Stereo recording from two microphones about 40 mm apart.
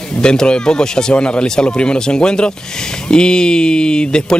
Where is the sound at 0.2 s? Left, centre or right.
Left.